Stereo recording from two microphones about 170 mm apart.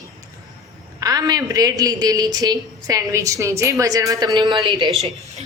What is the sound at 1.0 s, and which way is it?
A woman's voice, 20° right (ahead or behind).